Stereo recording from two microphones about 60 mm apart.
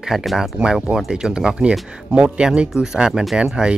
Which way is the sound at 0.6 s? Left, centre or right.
Centre.